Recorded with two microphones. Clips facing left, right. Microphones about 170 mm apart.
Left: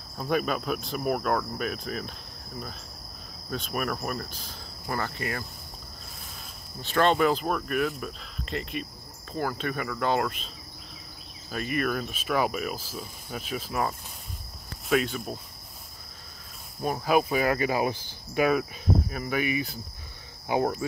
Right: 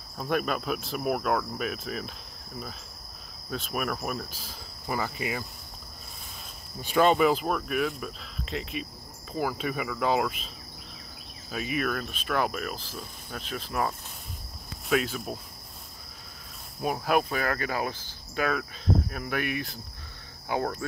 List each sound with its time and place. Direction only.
0.2 s cricket: centre (ahead or behind)
6.8 s cricket: 10° right (ahead or behind)
11.5 s cricket: centre (ahead or behind)
16.8 s cricket: 5° right (ahead or behind); by 18.7 s 15° left (ahead or behind)
19.0 s cricket: centre (ahead or behind)
20.4 s cricket: 15° left (ahead or behind)